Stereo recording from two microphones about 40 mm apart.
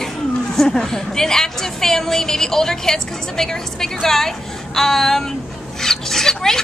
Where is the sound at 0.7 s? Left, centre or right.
Centre.